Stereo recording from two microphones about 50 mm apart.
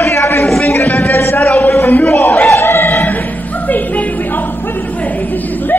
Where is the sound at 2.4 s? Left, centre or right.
Left.